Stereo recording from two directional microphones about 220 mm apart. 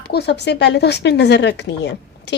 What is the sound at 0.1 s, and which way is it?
Speech, 50° left (ahead or behind).